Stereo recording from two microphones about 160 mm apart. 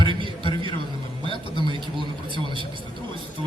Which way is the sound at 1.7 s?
30° right (ahead or behind).